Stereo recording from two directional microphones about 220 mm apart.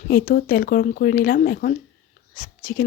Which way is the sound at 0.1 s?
40° left (ahead or behind).